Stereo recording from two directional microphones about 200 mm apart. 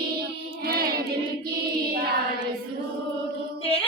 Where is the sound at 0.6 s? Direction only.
50° right (ahead or behind).